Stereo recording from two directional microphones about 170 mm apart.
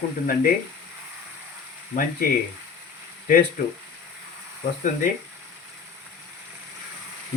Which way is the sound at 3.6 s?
55° left (ahead or behind).